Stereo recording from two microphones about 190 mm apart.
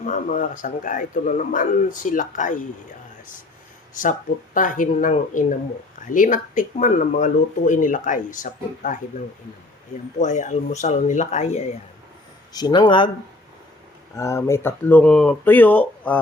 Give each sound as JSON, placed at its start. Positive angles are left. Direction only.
{"t": 0.0, "sound": "speech", "side_deg": 40}
{"t": 4.5, "sound": "speech", "side_deg": 45}
{"t": 10.2, "sound": "speech", "side_deg": 40}
{"t": 12.5, "sound": "speech", "side_deg": 20}
{"t": 14.2, "sound": "speech", "side_deg": 15}